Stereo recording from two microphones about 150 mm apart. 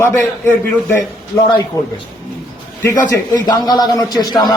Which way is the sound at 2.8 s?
20° left (ahead or behind).